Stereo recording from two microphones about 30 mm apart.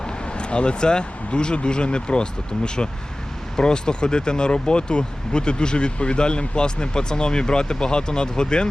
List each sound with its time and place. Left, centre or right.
0.0 s speech: left